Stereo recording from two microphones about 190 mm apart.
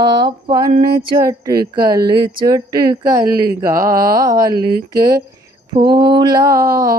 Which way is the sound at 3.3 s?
50° right (ahead or behind).